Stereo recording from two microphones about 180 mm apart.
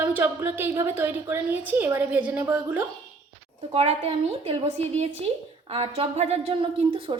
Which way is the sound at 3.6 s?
35° right (ahead or behind).